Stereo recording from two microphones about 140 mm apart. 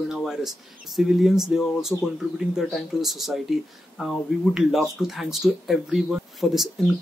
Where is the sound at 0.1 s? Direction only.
Centre (ahead or behind).